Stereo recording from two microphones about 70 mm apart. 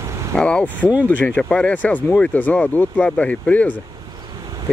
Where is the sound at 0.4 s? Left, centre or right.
Centre.